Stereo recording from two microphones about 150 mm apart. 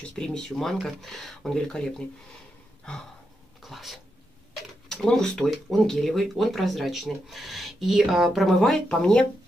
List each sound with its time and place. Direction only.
0.1 s speech: 5° left (ahead or behind)
3.6 s speech: centre (ahead or behind)